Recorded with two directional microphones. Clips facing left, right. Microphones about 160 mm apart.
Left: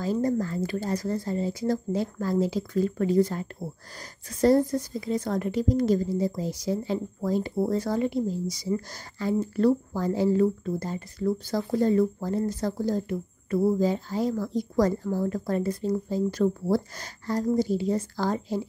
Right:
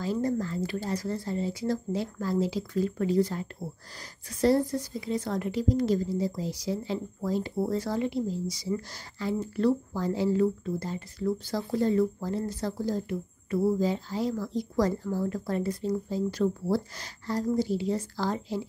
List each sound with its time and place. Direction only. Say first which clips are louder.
0.0 s a woman's voice: left 3 dB; 45° left (ahead or behind)